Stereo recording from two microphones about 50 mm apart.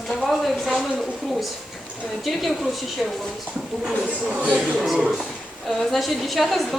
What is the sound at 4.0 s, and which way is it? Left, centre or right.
Speech, right.